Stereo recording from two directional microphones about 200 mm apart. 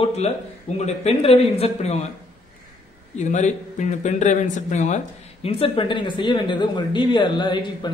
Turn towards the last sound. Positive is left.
turn(degrees=20)  # may be behind; listen again after turning